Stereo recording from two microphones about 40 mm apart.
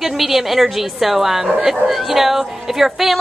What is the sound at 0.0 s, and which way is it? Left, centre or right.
A woman's voice, centre.